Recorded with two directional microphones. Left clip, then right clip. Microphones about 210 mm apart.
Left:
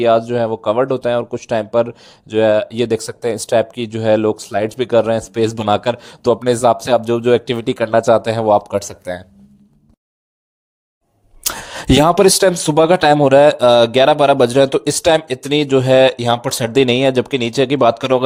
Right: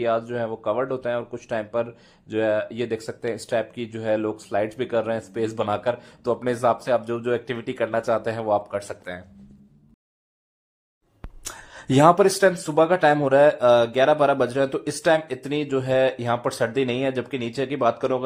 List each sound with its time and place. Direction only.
0.0 s speech: 30° left (ahead or behind)
11.4 s speech: 40° left (ahead or behind)